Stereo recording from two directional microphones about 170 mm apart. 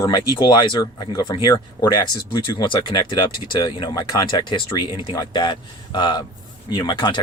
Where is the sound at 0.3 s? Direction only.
25° left (ahead or behind).